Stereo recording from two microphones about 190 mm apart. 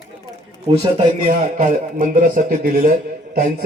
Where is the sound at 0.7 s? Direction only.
30° right (ahead or behind).